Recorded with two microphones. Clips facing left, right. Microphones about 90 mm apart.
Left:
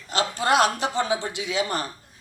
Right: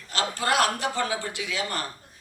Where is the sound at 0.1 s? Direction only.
20° left (ahead or behind).